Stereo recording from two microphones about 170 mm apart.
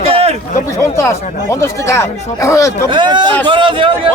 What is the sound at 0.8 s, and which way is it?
Speech, 15° left (ahead or behind).